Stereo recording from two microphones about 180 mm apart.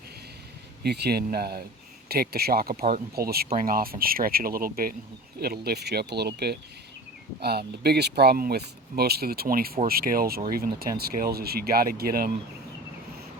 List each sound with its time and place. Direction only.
0.8 s speech: 65° right (ahead or behind)